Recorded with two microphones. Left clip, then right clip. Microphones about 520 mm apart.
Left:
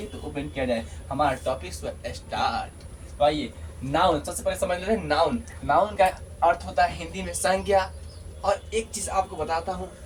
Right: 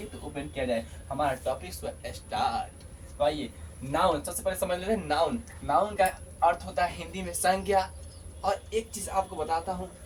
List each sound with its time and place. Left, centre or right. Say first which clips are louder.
0.3 s speech: left 3 dB; right